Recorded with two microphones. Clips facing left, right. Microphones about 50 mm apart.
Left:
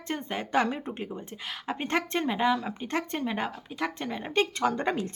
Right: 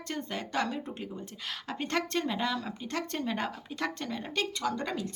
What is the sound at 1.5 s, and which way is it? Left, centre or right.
Speech, centre.